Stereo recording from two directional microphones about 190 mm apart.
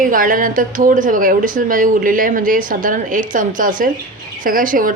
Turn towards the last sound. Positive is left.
turn(degrees=-45)  # may be behind; listen again after turning